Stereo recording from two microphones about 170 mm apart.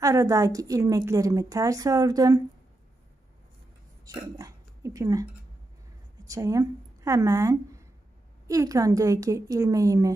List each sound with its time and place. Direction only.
0.0 s a woman's voice: 20° right (ahead or behind)
4.0 s speech: 20° right (ahead or behind)
6.2 s a woman's voice: 20° right (ahead or behind)